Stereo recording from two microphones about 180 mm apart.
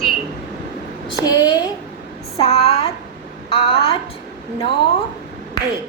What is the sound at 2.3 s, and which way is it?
Speech, 30° left (ahead or behind).